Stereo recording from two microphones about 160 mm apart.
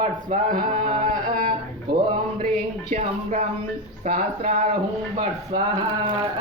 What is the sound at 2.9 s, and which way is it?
Speech, 40° right (ahead or behind).